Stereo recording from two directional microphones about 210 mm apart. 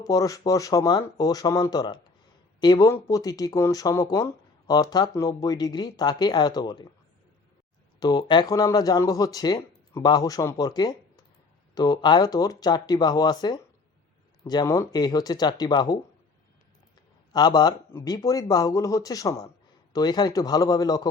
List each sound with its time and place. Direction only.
0.0 s speech: 15° left (ahead or behind)
7.9 s speech: 20° left (ahead or behind)
17.3 s speech: 20° left (ahead or behind)